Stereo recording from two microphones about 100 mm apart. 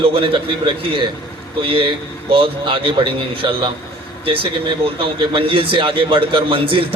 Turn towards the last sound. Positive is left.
turn(degrees=-65)  # may be behind; listen again after turning